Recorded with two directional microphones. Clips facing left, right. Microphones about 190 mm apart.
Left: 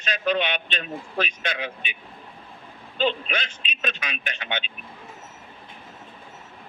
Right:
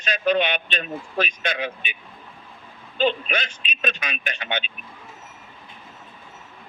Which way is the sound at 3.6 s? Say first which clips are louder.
Right 3 dB; 45° right (ahead or behind).